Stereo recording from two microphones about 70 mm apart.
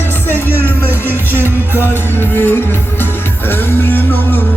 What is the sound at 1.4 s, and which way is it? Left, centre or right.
Music, right.